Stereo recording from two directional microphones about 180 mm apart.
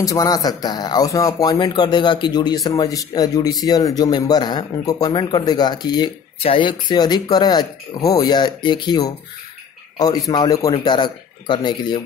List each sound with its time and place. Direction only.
0.0 s speech: 20° left (ahead or behind)